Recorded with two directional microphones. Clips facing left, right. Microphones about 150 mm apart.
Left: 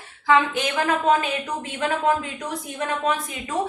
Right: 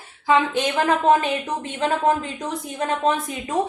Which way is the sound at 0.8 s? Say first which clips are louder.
Right 2 dB; 25° right (ahead or behind).